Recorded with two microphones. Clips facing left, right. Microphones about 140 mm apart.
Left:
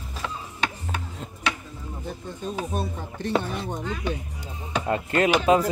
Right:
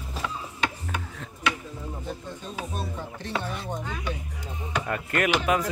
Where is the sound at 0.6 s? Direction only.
30° left (ahead or behind).